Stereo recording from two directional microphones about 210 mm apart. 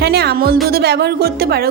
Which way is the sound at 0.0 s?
50° right (ahead or behind).